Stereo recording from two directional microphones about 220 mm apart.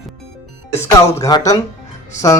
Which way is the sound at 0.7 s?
15° left (ahead or behind).